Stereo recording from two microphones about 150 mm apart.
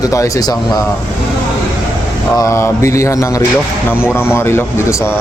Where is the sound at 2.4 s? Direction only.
20° left (ahead or behind).